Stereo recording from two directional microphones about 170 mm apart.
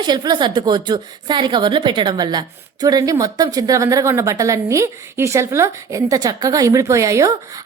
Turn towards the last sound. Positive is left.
turn(degrees=-20)  # may be behind; listen again after turning